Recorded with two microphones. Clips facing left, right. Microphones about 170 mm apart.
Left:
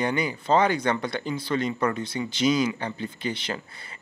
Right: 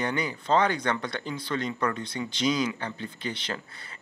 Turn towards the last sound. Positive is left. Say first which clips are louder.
# left 3 dB
turn(degrees=10)  # may be behind; listen again after turning